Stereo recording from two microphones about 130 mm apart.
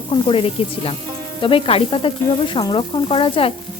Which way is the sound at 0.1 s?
45° left (ahead or behind).